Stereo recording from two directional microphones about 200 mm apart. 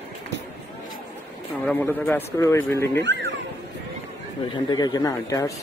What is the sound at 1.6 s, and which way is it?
Speech, 10° left (ahead or behind).